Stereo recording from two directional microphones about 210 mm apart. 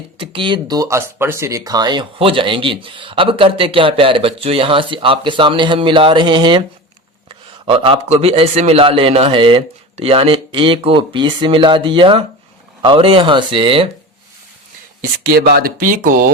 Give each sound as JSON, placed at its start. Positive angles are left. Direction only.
{"t": 0.2, "sound": "speech", "side_deg": -25}
{"t": 15.2, "sound": "speech", "side_deg": -45}